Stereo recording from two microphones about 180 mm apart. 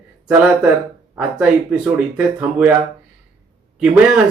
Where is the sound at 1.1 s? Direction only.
5° right (ahead or behind).